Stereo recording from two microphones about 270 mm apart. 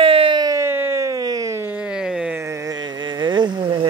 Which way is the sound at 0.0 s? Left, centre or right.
Centre.